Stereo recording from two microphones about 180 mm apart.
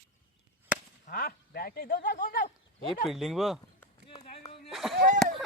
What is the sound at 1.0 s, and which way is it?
Speech, 55° left (ahead or behind).